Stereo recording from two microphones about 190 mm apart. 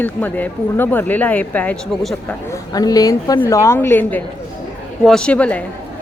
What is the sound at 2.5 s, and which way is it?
Speech, 20° left (ahead or behind).